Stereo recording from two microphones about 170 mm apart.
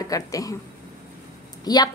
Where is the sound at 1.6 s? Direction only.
25° left (ahead or behind).